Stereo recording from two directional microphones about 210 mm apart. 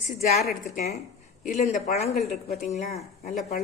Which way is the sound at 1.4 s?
35° left (ahead or behind).